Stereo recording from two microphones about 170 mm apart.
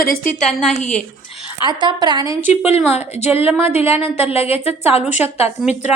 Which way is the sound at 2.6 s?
40° left (ahead or behind).